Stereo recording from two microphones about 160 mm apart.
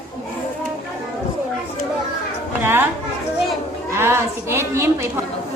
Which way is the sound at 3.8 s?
15° right (ahead or behind).